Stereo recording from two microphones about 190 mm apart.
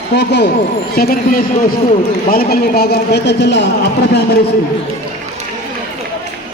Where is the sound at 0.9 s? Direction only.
50° left (ahead or behind).